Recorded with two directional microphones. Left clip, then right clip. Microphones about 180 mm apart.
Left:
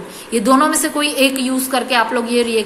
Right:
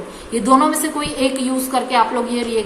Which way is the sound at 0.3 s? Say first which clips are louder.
Left 1 dB; 10° left (ahead or behind).